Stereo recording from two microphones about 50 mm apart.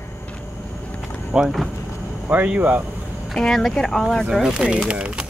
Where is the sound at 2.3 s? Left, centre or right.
Right.